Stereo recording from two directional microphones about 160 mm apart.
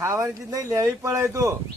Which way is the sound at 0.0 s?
15° right (ahead or behind).